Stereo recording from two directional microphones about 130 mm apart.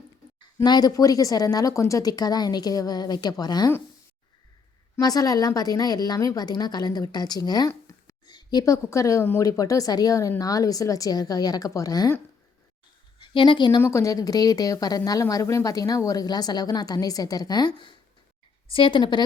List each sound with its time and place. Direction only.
0.6 s speech: 30° left (ahead or behind)
4.9 s a woman's voice: 30° left (ahead or behind)
13.1 s a woman's voice: 40° left (ahead or behind)
13.8 s a woman's voice: 20° left (ahead or behind)